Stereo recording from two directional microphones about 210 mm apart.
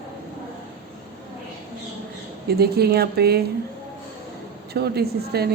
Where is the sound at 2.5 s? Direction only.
50° right (ahead or behind).